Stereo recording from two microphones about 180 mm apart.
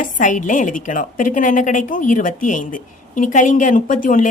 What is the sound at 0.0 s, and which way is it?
A woman's voice, 45° left (ahead or behind).